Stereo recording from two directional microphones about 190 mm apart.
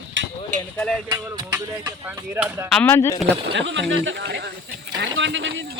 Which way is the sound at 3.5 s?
70° right (ahead or behind).